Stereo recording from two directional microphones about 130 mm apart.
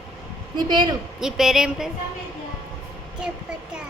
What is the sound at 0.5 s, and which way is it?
Speech, 35° right (ahead or behind).